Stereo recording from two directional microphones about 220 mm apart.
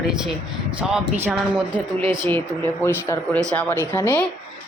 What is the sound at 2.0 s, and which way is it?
Speech, 20° right (ahead or behind).